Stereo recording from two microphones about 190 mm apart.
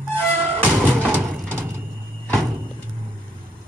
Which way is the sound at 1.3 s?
5° left (ahead or behind).